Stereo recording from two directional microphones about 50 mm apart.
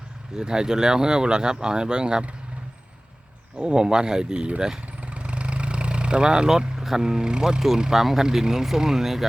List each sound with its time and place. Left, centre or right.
0.3 s speech: centre
3.6 s speech: centre